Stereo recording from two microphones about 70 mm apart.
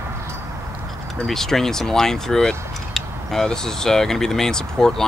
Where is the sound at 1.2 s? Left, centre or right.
Centre.